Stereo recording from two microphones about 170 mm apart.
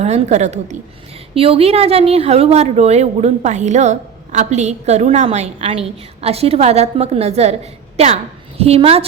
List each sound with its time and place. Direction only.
0.0 s a woman's voice: 40° right (ahead or behind)